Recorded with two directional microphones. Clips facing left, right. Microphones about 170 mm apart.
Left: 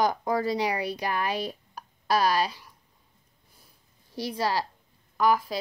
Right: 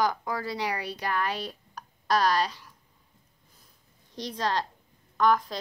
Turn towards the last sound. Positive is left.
turn(degrees=10)  # may be behind; listen again after turning